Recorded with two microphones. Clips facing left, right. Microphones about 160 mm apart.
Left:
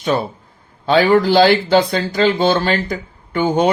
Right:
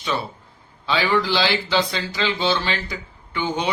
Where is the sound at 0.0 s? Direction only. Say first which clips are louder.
Left 8 dB; 50° left (ahead or behind).